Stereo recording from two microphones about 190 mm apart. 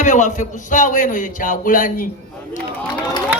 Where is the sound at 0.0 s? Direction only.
40° left (ahead or behind).